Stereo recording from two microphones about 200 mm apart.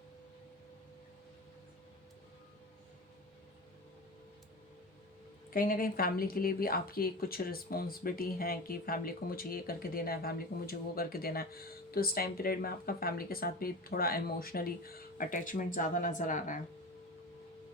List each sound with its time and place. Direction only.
5.5 s speech: 45° left (ahead or behind)